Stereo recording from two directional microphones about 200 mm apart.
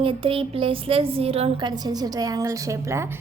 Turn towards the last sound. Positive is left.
turn(degrees=-15)  # may be behind; listen again after turning